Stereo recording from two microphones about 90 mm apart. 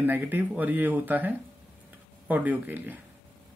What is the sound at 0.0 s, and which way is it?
Speech, 20° right (ahead or behind).